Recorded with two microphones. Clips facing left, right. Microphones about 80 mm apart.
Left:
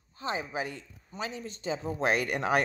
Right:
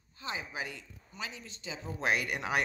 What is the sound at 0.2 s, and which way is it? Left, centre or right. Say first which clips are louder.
A man's voice: left 6 dB; left.